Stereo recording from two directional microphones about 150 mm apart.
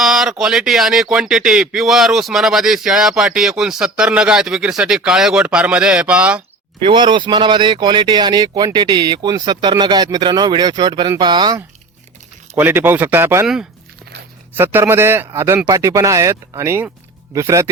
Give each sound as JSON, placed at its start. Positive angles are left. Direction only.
{"t": 0.0, "sound": "speech", "side_deg": 0}
{"t": 6.7, "sound": "speech", "side_deg": -35}
{"t": 12.5, "sound": "a man's voice", "side_deg": -15}
{"t": 14.5, "sound": "a man's voice", "side_deg": -15}